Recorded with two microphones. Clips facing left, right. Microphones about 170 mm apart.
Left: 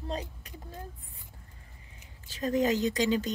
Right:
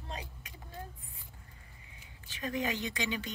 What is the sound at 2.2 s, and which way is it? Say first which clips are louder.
A woman's voice: left 8 dB; 40° left (ahead or behind).